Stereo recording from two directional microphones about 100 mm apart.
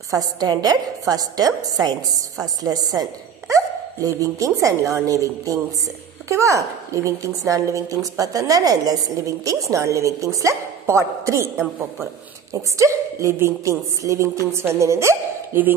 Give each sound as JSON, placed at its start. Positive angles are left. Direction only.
{"t": 0.1, "sound": "a woman's voice", "side_deg": -40}
{"t": 12.5, "sound": "a woman's voice", "side_deg": -30}